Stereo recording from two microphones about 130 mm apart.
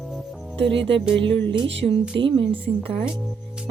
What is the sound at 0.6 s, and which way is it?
Speech, 45° right (ahead or behind).